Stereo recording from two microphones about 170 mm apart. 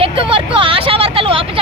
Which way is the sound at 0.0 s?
30° right (ahead or behind).